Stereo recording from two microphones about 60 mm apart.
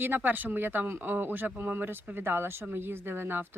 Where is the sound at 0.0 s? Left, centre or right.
Right.